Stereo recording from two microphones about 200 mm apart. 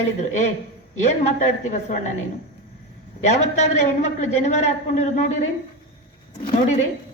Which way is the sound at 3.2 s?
35° left (ahead or behind).